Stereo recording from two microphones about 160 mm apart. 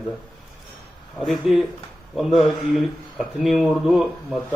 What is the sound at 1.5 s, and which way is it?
Speech, centre (ahead or behind).